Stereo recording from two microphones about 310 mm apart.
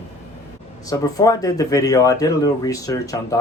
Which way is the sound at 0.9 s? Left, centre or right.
Centre.